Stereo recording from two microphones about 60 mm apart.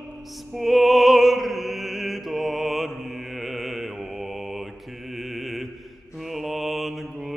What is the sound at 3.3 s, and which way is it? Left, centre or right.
Mantra, centre.